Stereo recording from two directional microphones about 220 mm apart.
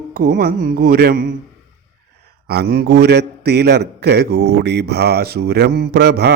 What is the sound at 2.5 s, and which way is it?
Speech, 45° right (ahead or behind).